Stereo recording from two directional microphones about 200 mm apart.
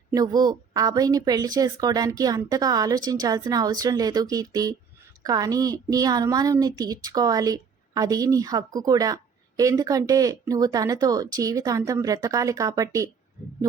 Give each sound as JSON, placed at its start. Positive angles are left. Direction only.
{"t": 0.1, "sound": "a woman's voice", "side_deg": -20}